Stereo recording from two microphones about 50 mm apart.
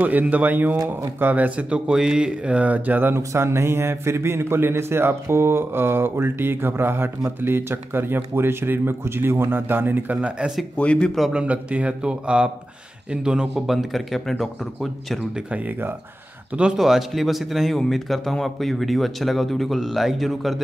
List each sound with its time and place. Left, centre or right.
0.0 s speech: right
1.9 s speech: centre; by 3.2 s right
3.2 s a man's voice: right
10.8 s speech: left
11.3 s speech: right
13.7 s speech: centre
16.7 s speech: centre